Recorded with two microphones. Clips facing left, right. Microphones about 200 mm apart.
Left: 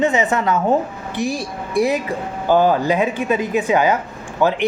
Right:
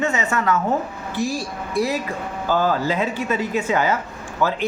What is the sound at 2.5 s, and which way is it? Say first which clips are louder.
A woman's voice: left 5 dB; 20° left (ahead or behind).